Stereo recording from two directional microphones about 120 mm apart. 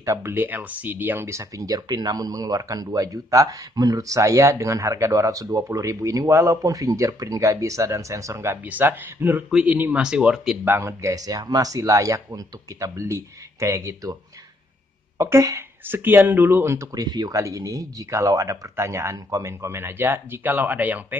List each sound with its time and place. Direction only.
0.0 s speech: 25° right (ahead or behind); by 10.6 s 5° right (ahead or behind)
10.6 s speech: 20° right (ahead or behind)
15.1 s speech: 25° right (ahead or behind)